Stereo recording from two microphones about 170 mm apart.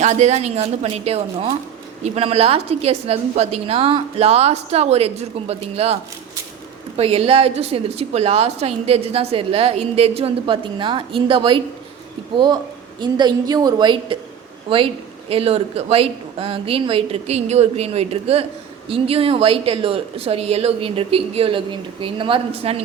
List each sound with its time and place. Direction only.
0.0 s a woman's voice: 45° right (ahead or behind)
13.0 s a woman's voice: 25° right (ahead or behind)